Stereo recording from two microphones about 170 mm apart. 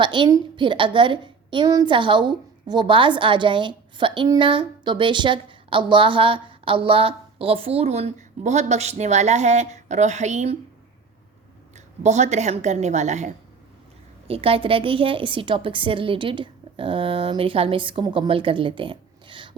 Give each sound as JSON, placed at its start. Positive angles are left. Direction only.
{"t": 0.0, "sound": "a woman's voice", "side_deg": -30}
{"t": 12.0, "sound": "a woman's voice", "side_deg": -40}